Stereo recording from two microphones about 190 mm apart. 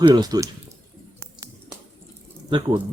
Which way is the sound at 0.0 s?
20° right (ahead or behind).